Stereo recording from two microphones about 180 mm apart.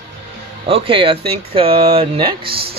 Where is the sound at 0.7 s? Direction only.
30° right (ahead or behind).